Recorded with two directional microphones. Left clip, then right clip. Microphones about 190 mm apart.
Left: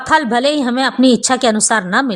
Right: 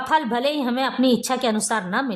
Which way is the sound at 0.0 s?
20° left (ahead or behind).